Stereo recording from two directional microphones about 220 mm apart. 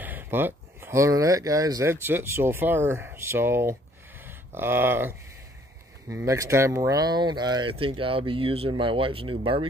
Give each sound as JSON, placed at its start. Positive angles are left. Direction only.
{"t": 0.0, "sound": "speech", "side_deg": -10}